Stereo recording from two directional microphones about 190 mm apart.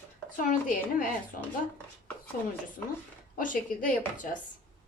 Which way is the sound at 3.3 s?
45° left (ahead or behind).